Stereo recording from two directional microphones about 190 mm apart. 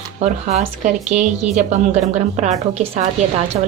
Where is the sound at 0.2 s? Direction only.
35° right (ahead or behind).